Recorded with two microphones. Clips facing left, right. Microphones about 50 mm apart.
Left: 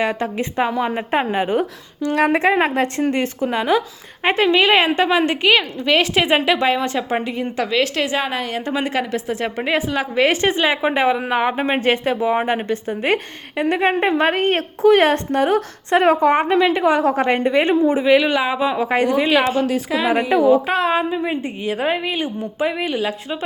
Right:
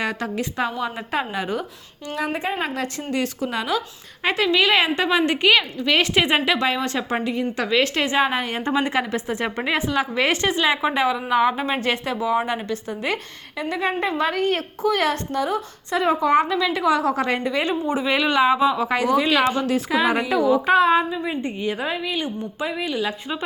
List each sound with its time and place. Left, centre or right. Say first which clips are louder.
0.0 s a woman's voice: left 4 dB; centre
2.1 s a woman's voice: left 9 dB; left
2.6 s a woman's voice: left 8 dB; left; by 9.5 s centre
9.6 s a woman's voice: left 2 dB; centre
10.4 s a woman's voice: left 3 dB; centre
13.6 s a woman's voice: left 6 dB; left
15.4 s a woman's voice: left 6 dB; left
17.8 s a woman's voice: left 6 dB; left
18.1 s a woman's voice: right 2 dB; centre
18.7 s a woman's voice: left 2 dB; left; by 20.9 s centre
21.1 s a woman's voice: left 4 dB; left
21.4 s a woman's voice: left 1 dB; centre
21.8 s a woman's voice: left 5 dB; left
23.0 s a woman's voice: left 2 dB; centre